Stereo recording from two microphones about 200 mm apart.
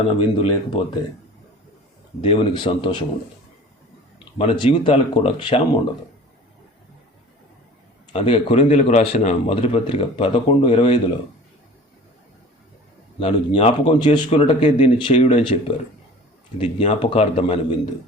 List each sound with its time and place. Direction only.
0.4 s a man's voice: 30° left (ahead or behind)
2.2 s a man's voice: 25° left (ahead or behind)
4.4 s a man's voice: 25° left (ahead or behind)
8.1 s a man's voice: 30° left (ahead or behind)
13.1 s speech: 30° left (ahead or behind)
14.0 s a man's voice: 25° left (ahead or behind)